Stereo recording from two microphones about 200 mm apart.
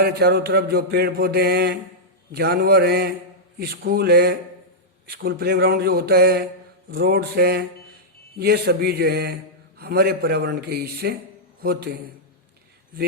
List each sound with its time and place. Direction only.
0.0 s a man's voice: 55° right (ahead or behind)